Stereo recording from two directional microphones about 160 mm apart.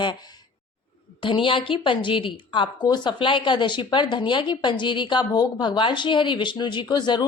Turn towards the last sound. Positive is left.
turn(degrees=30)  # may be behind; listen again after turning